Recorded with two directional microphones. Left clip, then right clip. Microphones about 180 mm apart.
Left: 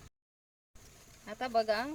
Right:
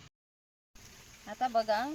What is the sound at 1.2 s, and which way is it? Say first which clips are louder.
Speech: right 1 dB; 30° left (ahead or behind).